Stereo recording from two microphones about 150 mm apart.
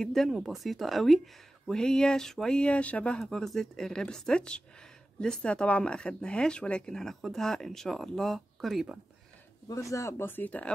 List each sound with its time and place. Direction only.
0.0 s speech: centre (ahead or behind)
9.7 s speech: 20° left (ahead or behind)